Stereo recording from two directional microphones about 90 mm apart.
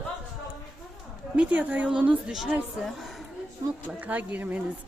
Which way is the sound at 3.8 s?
20° right (ahead or behind).